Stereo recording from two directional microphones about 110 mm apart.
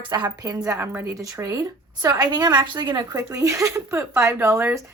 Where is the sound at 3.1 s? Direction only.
30° right (ahead or behind).